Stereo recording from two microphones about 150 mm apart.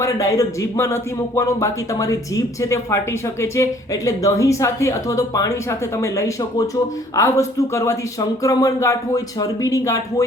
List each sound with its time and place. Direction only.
0.0 s speech: 20° left (ahead or behind)